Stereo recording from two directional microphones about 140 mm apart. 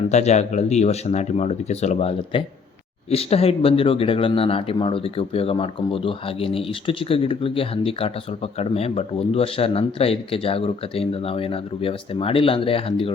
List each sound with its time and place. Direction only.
0.1 s speech: 55° left (ahead or behind)